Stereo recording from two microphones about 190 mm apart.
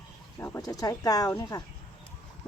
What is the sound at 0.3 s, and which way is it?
Speech, 15° left (ahead or behind).